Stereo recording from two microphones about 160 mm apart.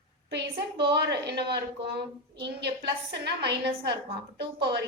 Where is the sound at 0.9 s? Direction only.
90° right.